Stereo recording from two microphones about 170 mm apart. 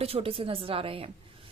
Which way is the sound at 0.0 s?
35° right (ahead or behind).